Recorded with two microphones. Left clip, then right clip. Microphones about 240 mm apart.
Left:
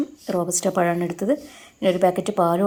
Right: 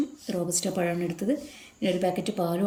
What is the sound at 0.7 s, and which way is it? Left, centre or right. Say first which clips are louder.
Speech: left 8 dB; left.